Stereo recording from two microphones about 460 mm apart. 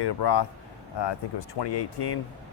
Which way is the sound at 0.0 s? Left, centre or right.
Left.